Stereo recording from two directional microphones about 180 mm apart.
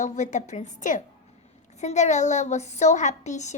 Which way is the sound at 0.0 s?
40° left (ahead or behind).